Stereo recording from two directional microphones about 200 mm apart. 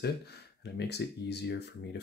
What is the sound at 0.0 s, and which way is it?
Speech, 55° left (ahead or behind).